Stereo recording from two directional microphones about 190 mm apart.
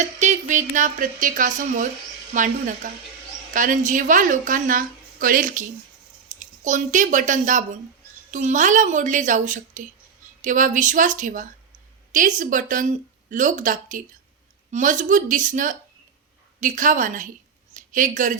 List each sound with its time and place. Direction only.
0.0 s a woman's voice: 40° right (ahead or behind)